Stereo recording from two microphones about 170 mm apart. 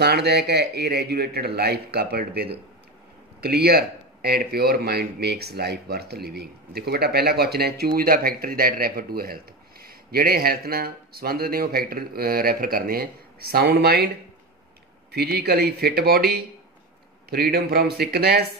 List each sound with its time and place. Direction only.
0.0 s a man's voice: 70° right (ahead or behind)
15.0 s a man's voice: 70° right (ahead or behind)